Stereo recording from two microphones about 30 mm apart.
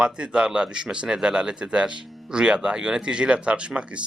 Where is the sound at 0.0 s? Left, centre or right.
Right.